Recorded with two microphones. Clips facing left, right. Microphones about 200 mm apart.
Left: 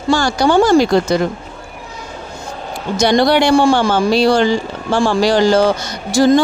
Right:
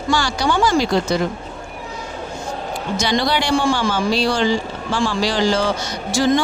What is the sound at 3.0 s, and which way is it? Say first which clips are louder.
Speech: left 9 dB; 60° left (ahead or behind).